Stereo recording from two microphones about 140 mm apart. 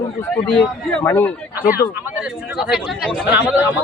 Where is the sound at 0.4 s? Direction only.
10° left (ahead or behind).